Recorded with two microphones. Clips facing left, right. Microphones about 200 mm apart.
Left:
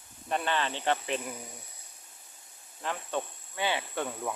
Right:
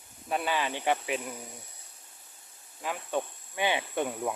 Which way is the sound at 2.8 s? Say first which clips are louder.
Right 2 dB; 10° right (ahead or behind).